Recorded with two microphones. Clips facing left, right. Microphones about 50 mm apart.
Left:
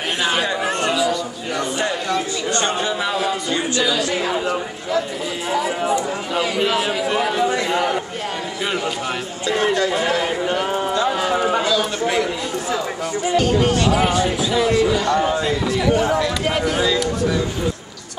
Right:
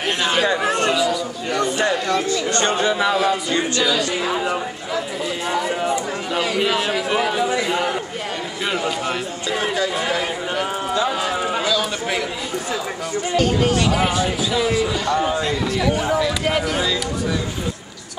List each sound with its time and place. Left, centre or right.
0.2 s chatter: centre
0.7 s a sound: centre
3.0 s speech: centre
5.5 s speech: centre
9.5 s a man's voice: centre
13.3 s speech: centre